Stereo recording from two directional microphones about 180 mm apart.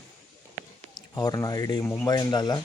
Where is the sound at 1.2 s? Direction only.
20° left (ahead or behind).